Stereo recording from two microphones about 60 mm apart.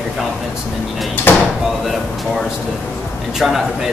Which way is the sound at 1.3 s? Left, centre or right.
Left.